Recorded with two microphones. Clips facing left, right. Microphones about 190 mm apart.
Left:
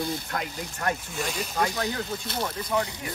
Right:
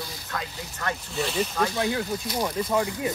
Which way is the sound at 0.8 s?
10° left (ahead or behind).